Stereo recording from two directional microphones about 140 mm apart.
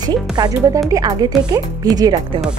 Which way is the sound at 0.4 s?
30° right (ahead or behind).